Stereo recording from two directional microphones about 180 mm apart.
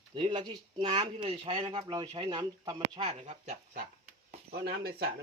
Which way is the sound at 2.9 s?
35° right (ahead or behind).